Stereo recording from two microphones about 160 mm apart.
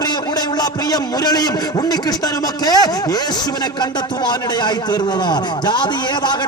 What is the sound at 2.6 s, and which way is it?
Speech, 25° left (ahead or behind).